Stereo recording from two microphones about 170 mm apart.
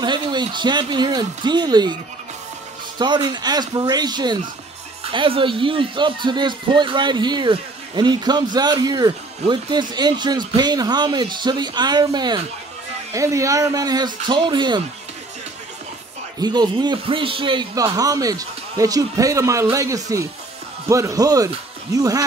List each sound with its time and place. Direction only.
0.0 s speech: 25° right (ahead or behind)
3.0 s speech: 25° right (ahead or behind)
16.3 s speech: 25° right (ahead or behind)